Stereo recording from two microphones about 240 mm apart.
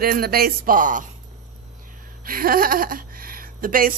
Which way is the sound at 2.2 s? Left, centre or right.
Right.